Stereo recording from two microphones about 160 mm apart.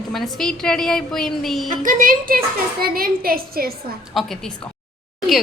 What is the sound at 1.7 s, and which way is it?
A woman's voice, 55° right (ahead or behind).